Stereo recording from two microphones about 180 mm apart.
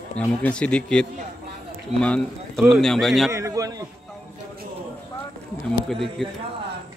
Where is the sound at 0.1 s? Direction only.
10° left (ahead or behind).